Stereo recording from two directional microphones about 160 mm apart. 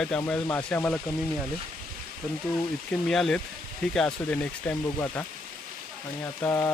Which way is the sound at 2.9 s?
5° left (ahead or behind).